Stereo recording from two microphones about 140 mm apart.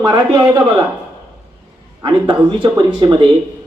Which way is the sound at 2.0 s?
30° right (ahead or behind).